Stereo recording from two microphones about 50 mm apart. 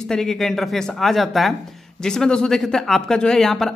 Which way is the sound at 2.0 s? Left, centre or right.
Centre.